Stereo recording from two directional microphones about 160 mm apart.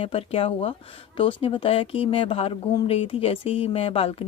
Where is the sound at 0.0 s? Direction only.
35° left (ahead or behind).